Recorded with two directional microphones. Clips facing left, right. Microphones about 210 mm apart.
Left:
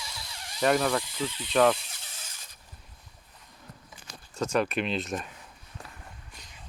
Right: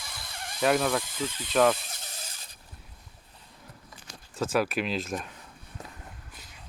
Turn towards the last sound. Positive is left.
turn(degrees=-20)  # may be behind; listen again after turning